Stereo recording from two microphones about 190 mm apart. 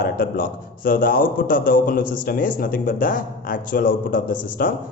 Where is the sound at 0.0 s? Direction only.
50° left (ahead or behind).